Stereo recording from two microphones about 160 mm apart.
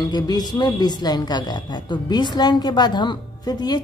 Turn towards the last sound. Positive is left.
turn(degrees=25)  # may be behind; listen again after turning